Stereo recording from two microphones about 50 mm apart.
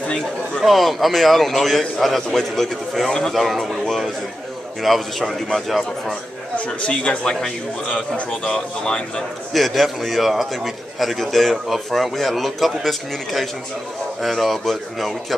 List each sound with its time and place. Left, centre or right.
0.6 s a man's voice: centre
6.5 s a man's voice: left
8.5 s speech: centre
9.5 s a man's voice: centre